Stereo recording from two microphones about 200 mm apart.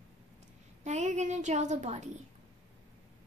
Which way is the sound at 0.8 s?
35° right (ahead or behind).